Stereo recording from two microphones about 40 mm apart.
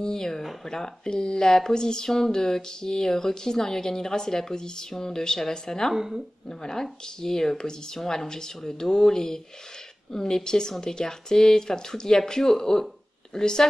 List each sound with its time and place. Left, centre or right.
0.0 s speech: centre
5.9 s speech: centre
6.6 s speech: centre